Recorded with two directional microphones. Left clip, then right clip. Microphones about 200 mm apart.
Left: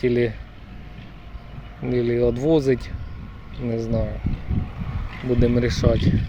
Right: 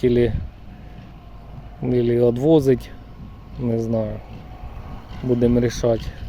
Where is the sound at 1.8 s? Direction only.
20° right (ahead or behind).